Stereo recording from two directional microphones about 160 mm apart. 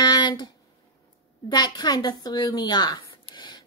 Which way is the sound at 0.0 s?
25° left (ahead or behind).